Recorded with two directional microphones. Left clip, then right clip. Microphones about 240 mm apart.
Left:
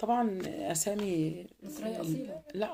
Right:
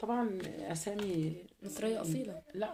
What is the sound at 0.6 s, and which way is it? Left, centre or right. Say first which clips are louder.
Speech: left 10 dB; left.